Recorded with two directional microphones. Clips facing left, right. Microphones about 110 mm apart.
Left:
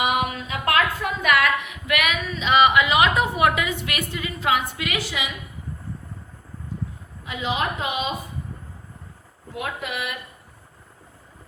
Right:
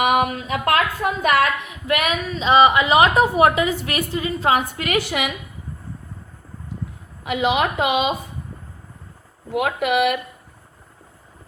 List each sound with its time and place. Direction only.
0.0 s a woman's voice: 50° right (ahead or behind)
7.3 s a woman's voice: 70° right (ahead or behind)
9.5 s speech: 65° right (ahead or behind)